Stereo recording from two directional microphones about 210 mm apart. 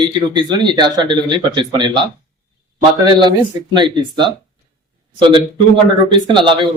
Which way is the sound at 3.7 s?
20° right (ahead or behind).